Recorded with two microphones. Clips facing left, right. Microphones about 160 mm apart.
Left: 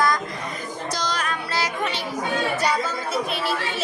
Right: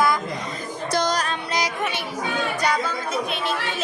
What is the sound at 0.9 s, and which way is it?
Music, 55° right (ahead or behind).